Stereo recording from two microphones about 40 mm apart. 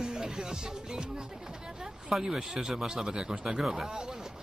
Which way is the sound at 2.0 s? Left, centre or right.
Centre.